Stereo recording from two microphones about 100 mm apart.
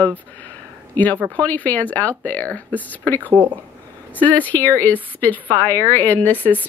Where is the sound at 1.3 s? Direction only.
15° left (ahead or behind).